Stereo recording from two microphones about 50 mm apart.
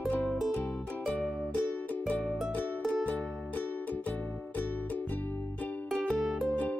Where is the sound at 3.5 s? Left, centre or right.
Left.